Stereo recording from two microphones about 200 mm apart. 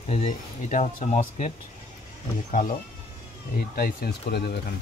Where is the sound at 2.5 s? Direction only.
40° left (ahead or behind).